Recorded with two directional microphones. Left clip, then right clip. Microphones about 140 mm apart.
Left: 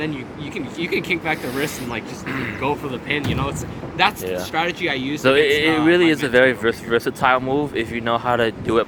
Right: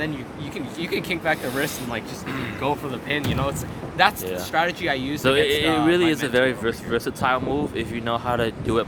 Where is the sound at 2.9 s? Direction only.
50° right (ahead or behind).